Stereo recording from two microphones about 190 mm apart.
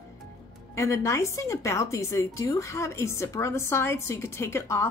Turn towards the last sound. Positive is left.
turn(degrees=15)  # may be behind; listen again after turning